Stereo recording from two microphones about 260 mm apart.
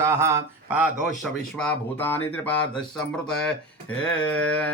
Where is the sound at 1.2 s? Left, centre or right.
Centre.